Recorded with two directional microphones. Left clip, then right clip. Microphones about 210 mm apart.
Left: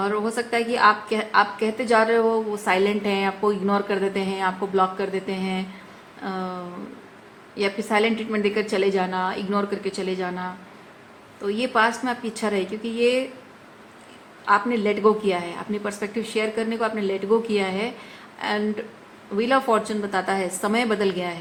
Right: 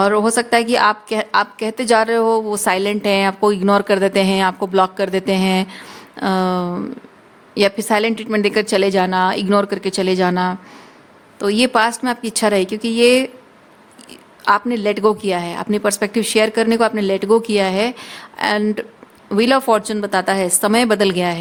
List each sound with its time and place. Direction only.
0.0 s a woman's voice: 60° right (ahead or behind)
14.4 s a woman's voice: 55° right (ahead or behind)